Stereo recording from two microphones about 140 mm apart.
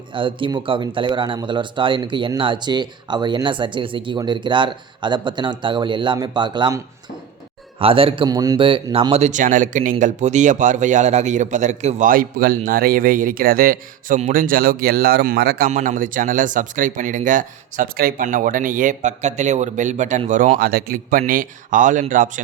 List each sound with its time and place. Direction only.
0.1 s speech: 35° right (ahead or behind)
7.8 s speech: 40° right (ahead or behind)
8.6 s speech: 40° right (ahead or behind); by 14.2 s 90° right
14.2 s speech: 75° right (ahead or behind)